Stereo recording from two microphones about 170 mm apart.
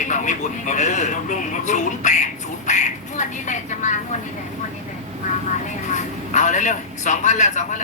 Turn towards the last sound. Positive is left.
turn(degrees=45)  # may be behind; listen again after turning